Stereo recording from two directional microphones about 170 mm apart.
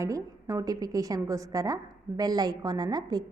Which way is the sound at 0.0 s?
20° right (ahead or behind).